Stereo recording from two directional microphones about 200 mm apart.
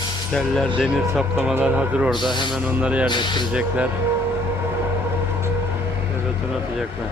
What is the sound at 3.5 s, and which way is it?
Speech, 5° right (ahead or behind).